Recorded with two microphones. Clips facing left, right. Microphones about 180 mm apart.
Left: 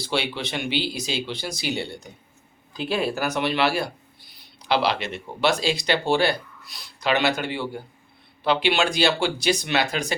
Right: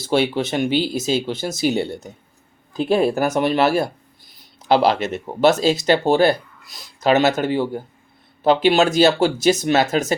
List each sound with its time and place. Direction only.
0.0 s speech: 45° right (ahead or behind)